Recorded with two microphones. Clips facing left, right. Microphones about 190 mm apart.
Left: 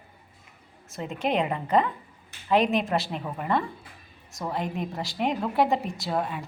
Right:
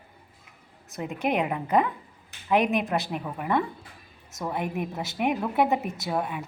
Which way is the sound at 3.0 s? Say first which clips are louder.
Right 1 dB; 15° right (ahead or behind).